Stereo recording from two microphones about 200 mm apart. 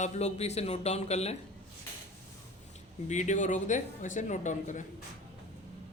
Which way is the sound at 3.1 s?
35° left (ahead or behind).